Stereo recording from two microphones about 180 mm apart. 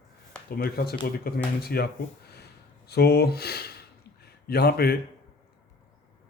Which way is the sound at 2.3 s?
65° left (ahead or behind).